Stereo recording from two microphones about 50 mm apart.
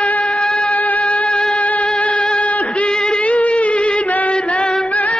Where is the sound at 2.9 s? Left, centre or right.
Centre.